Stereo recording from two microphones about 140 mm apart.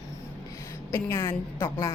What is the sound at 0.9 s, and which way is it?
Speech, 20° left (ahead or behind).